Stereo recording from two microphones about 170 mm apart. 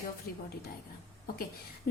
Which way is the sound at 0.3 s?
60° left (ahead or behind).